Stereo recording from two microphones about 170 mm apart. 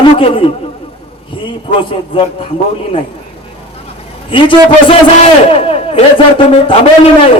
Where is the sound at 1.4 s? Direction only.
30° left (ahead or behind).